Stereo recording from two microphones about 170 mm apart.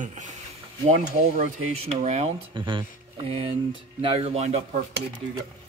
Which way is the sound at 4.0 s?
35° right (ahead or behind).